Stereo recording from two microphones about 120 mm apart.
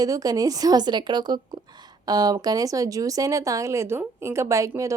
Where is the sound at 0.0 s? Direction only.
30° right (ahead or behind).